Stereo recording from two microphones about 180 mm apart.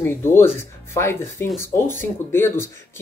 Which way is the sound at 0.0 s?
15° left (ahead or behind).